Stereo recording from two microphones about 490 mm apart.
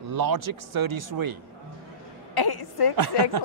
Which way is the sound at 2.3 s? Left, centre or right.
Left.